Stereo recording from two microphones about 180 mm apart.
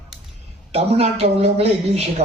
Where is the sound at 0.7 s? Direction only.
35° right (ahead or behind).